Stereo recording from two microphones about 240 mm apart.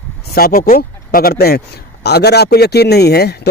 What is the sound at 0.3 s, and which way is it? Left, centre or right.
A man's voice, left.